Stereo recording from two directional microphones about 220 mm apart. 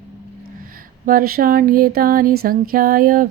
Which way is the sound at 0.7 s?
40° right (ahead or behind).